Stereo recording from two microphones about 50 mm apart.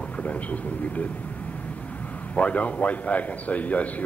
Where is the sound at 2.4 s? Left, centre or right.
Left.